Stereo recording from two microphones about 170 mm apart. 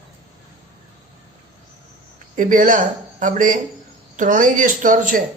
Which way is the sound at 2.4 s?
50° right (ahead or behind).